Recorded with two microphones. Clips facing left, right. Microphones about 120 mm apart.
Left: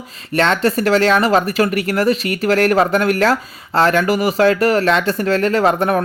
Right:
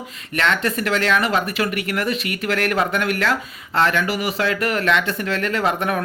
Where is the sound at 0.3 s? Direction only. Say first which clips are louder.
Left 6 dB; 35° left (ahead or behind).